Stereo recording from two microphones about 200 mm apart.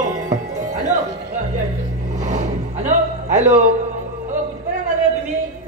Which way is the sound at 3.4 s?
35° right (ahead or behind).